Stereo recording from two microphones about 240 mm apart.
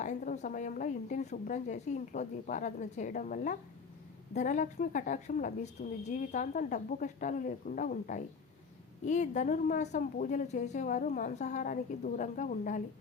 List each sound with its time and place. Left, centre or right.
0.0 s a woman's voice: left